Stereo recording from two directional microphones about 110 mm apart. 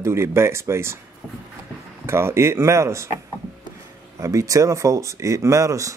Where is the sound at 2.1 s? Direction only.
25° right (ahead or behind).